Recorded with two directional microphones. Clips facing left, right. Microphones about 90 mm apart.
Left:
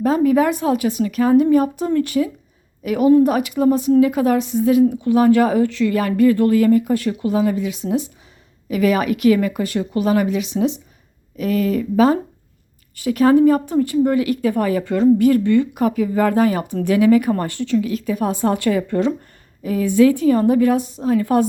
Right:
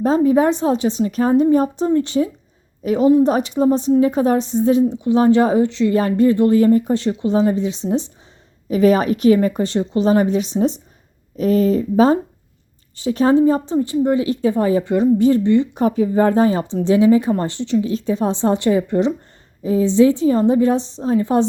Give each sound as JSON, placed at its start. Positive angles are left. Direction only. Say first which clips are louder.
{"t": 0.0, "sound": "a woman's voice", "louder": "right 1 dB", "side_deg": -30}